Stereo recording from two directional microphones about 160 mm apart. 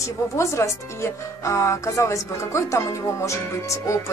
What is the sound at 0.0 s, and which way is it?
Speech, 20° left (ahead or behind).